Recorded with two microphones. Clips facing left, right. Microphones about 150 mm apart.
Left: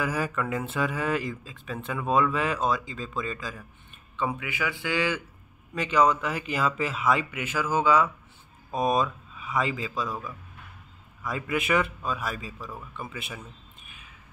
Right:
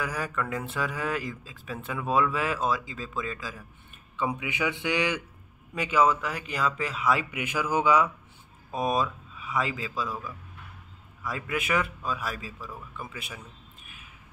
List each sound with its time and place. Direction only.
0.0 s speech: 5° left (ahead or behind)
4.2 s a man's voice: 15° right (ahead or behind); by 7.2 s centre (ahead or behind)
7.2 s a man's voice: 10° right (ahead or behind)
8.7 s speech: centre (ahead or behind)
11.2 s speech: centre (ahead or behind)
13.8 s a sound: 5° right (ahead or behind)